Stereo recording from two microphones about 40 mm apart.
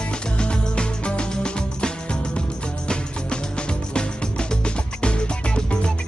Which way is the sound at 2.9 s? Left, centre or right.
Left.